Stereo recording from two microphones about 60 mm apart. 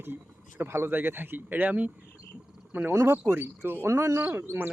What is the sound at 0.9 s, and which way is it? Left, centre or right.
Speech, right.